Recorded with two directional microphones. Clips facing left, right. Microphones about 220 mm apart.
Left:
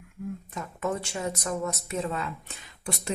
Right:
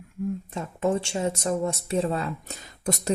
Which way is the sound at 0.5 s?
30° right (ahead or behind).